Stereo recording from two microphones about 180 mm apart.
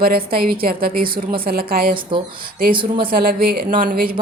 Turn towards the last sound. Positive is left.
turn(degrees=-50)  # may be behind; listen again after turning